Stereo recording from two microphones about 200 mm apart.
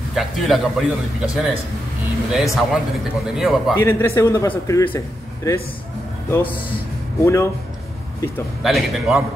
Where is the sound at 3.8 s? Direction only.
10° left (ahead or behind).